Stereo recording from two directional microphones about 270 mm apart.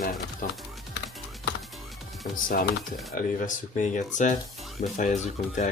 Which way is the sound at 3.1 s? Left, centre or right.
Left.